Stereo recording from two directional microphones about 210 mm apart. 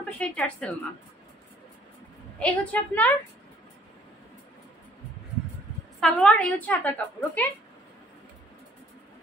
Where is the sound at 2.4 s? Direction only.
5° left (ahead or behind).